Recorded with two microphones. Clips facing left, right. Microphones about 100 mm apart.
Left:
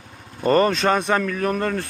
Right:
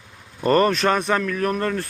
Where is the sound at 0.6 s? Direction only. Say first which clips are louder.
Even; 20° left (ahead or behind).